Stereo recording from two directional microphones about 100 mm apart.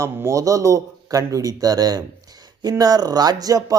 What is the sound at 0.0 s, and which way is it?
Speech, 30° right (ahead or behind).